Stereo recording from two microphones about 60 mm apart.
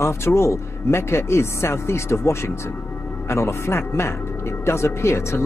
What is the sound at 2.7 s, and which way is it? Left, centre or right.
Music, left.